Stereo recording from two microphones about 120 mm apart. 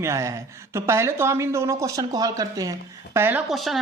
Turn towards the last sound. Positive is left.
turn(degrees=0)  # may be behind; listen again after turning